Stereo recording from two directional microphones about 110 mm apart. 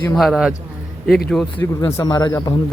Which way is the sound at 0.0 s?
5° left (ahead or behind).